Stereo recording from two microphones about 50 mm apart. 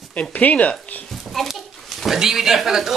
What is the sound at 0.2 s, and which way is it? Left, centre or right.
Speech, left.